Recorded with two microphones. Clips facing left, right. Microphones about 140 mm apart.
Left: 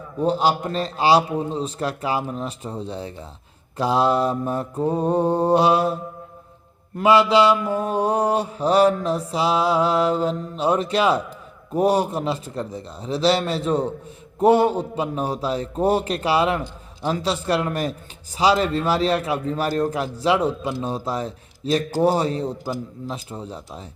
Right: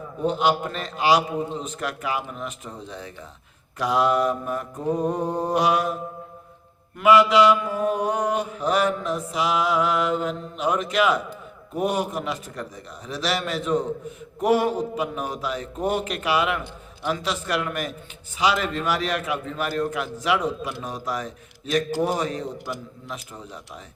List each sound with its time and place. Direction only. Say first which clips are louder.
0.3 s mantra: left 1 dB; 35° left (ahead or behind)